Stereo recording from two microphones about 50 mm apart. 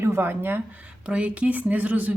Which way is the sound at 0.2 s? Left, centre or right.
Right.